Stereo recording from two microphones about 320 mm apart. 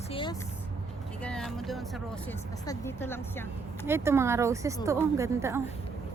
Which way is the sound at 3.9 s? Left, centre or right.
Centre.